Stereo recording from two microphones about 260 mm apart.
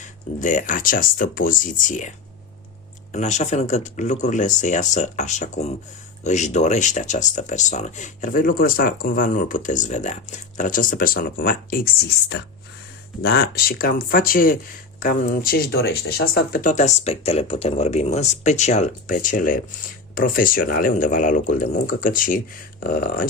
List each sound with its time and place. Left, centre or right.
0.0 s speech: left
13.2 s speech: left